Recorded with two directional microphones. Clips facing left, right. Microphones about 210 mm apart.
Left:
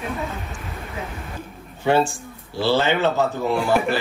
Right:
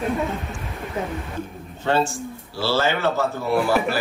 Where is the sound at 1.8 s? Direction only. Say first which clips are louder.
Left 2 dB; 15° left (ahead or behind).